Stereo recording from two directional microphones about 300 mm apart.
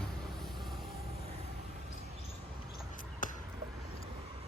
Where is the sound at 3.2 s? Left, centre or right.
Left.